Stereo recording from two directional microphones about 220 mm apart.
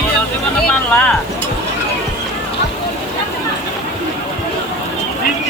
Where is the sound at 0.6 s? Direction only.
5° left (ahead or behind).